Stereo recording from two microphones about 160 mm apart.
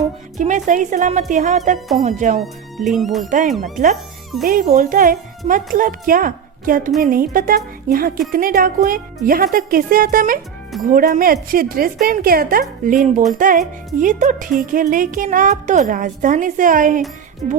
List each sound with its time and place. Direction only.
0.3 s speech: 50° right (ahead or behind)
2.4 s speech: centre (ahead or behind)
3.2 s a woman's voice: 55° right (ahead or behind)